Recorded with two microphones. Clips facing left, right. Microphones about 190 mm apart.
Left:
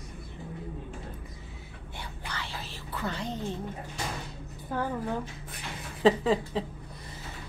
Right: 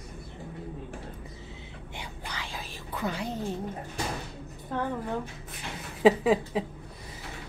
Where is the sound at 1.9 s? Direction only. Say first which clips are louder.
Even; 15° right (ahead or behind).